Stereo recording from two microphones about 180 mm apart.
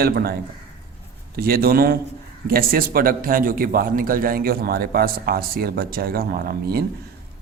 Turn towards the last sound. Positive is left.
turn(degrees=-55)  # may be behind; listen again after turning